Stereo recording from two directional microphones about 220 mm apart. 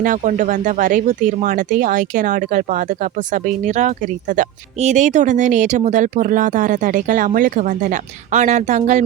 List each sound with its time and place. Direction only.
0.0 s speech: 35° right (ahead or behind)